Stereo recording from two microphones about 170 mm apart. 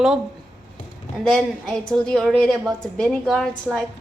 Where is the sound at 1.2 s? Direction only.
Centre (ahead or behind).